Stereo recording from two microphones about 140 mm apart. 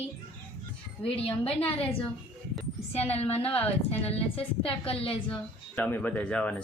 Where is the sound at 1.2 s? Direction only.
40° left (ahead or behind).